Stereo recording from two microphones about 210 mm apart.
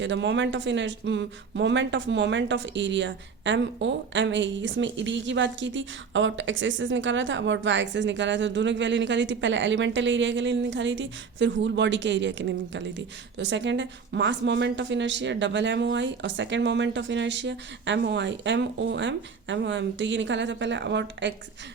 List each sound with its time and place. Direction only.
0.0 s speech: 60° right (ahead or behind)